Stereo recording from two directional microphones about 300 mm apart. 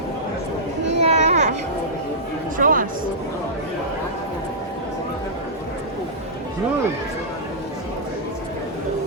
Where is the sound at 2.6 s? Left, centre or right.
Right.